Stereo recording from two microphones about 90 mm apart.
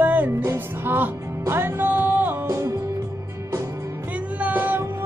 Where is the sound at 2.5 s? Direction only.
30° right (ahead or behind).